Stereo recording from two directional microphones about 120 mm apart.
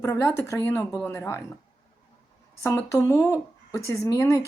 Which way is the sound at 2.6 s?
25° left (ahead or behind).